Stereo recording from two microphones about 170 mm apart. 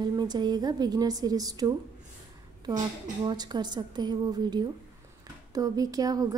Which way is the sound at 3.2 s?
25° right (ahead or behind).